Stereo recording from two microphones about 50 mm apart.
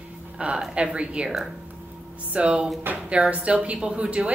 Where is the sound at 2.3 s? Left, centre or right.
Centre.